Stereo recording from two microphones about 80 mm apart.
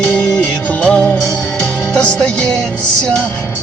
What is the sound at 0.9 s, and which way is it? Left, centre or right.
Music, centre.